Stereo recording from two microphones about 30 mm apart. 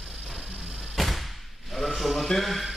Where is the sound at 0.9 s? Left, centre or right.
Centre.